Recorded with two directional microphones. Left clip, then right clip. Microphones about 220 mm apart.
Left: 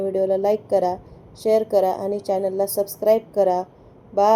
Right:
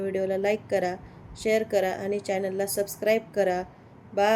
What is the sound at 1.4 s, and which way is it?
Speech, 15° right (ahead or behind).